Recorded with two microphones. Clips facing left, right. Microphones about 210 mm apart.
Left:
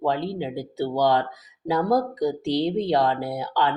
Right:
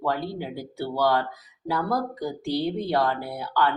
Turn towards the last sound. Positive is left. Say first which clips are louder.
# left 1 dB
turn(degrees=20)  # may be behind; listen again after turning